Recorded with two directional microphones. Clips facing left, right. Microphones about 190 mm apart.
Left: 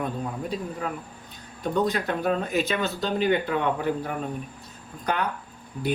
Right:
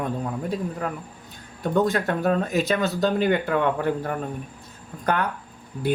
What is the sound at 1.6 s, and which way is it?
Speech, 50° right (ahead or behind).